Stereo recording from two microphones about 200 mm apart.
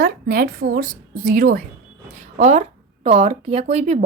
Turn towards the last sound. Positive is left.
turn(degrees=-35)  # may be behind; listen again after turning